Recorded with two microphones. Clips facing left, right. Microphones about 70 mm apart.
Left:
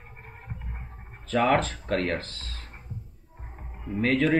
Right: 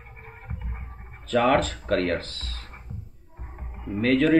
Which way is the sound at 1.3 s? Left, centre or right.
Left.